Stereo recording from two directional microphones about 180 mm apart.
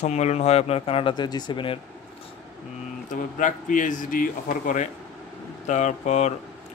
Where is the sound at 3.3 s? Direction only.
45° left (ahead or behind).